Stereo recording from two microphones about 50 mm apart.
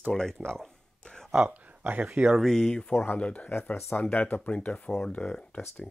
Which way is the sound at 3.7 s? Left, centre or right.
Left.